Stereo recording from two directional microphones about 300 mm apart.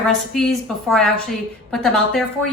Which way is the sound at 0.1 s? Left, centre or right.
Centre.